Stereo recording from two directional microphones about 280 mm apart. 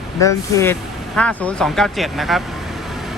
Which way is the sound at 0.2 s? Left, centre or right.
Centre.